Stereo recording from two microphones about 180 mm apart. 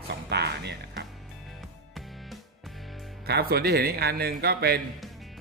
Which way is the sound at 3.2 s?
60° right (ahead or behind).